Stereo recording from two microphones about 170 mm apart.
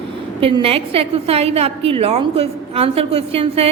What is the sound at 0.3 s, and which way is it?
A woman's voice, 30° right (ahead or behind).